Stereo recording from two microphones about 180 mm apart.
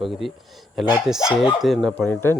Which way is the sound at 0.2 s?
Centre (ahead or behind).